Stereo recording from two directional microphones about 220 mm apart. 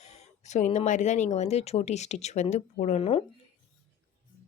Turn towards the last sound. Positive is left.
turn(degrees=25)  # may be behind; listen again after turning